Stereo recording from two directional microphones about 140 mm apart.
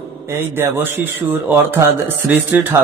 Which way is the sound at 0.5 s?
15° right (ahead or behind).